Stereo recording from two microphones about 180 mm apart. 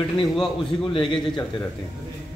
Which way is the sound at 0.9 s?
30° left (ahead or behind).